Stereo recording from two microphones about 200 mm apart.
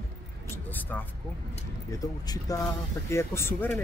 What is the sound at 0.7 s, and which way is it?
Speech, 10° left (ahead or behind).